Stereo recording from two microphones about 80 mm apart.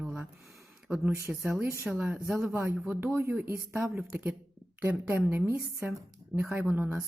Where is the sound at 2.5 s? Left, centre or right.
Right.